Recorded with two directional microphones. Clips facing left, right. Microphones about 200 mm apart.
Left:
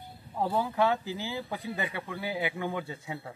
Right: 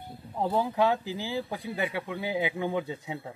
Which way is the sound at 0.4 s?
15° right (ahead or behind).